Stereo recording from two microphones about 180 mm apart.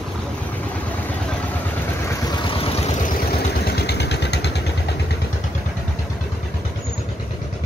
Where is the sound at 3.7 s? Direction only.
65° left (ahead or behind).